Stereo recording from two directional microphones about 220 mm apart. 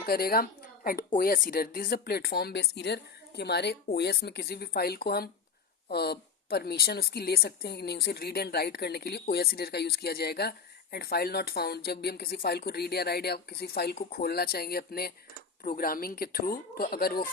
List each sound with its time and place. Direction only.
0.0 s speech: 45° left (ahead or behind)